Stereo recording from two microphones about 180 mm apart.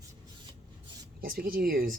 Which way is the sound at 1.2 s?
50° right (ahead or behind).